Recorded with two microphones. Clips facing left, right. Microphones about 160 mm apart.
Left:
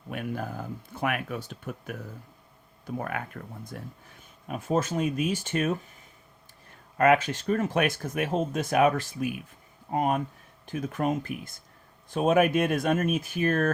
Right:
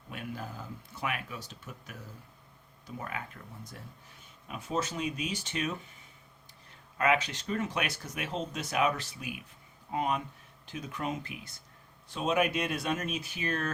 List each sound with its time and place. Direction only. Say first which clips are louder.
0.1 s speech: left 7 dB; 55° left (ahead or behind)
6.9 s speech: left 7 dB; 50° left (ahead or behind)